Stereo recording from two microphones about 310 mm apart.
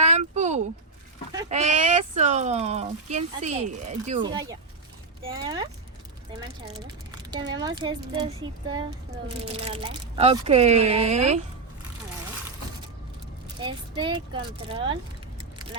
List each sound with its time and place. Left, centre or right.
0.0 s a sound: right
1.5 s speech: right
6.8 s speech: centre
9.5 s speech: centre
13.6 s speech: centre